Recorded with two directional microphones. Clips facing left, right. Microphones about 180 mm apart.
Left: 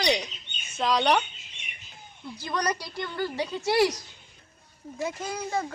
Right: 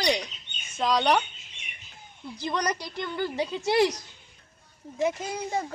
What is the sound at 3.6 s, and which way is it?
Speech, 20° right (ahead or behind).